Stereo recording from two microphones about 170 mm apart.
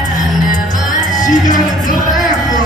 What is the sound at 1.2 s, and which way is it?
Music, 50° left (ahead or behind).